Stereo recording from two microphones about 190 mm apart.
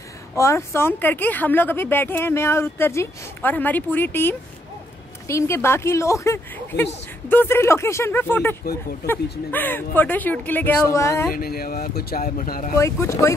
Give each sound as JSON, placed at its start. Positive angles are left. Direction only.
{"t": 0.4, "sound": "speech", "side_deg": 15}
{"t": 11.3, "sound": "speech", "side_deg": 50}
{"t": 12.7, "sound": "speech", "side_deg": 15}